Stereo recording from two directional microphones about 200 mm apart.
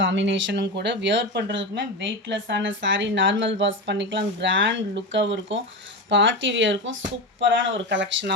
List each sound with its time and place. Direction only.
0.0 s speech: 65° right (ahead or behind)